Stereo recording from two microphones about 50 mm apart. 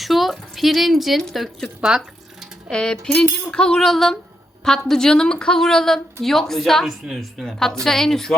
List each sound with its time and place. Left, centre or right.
0.0 s a sound: centre
1.2 s speech: centre
1.8 s drip: centre
2.6 s speech: centre